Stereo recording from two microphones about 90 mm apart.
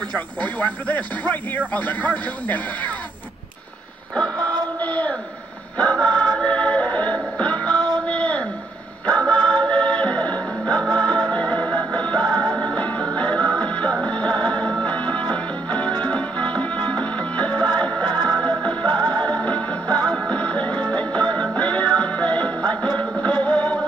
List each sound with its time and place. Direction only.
0.4 s music: 15° left (ahead or behind)
4.7 s speech: 15° left (ahead or behind)
5.8 s music: 10° left (ahead or behind)
8.1 s a sound: 15° left (ahead or behind)
9.3 s music: 10° left (ahead or behind)